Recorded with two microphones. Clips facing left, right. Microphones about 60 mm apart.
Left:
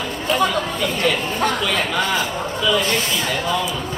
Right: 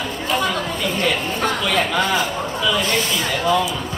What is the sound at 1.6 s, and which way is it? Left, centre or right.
Speech, centre.